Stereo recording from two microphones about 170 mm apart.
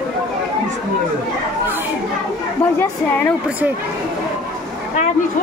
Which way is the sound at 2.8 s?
10° left (ahead or behind).